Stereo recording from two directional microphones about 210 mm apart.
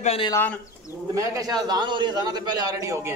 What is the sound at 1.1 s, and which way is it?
A man's voice, 15° right (ahead or behind).